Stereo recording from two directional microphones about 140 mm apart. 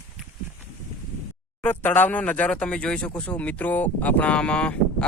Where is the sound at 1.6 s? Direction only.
15° left (ahead or behind).